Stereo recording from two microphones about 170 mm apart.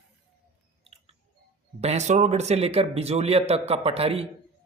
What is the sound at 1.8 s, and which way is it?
Speech, 40° right (ahead or behind).